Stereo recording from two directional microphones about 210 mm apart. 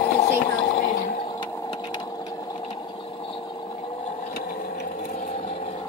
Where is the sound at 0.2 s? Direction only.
35° left (ahead or behind).